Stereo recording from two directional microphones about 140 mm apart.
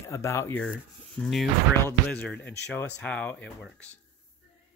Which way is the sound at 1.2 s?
Centre (ahead or behind).